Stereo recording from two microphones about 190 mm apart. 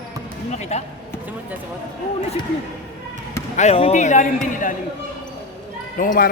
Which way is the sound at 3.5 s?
35° left (ahead or behind).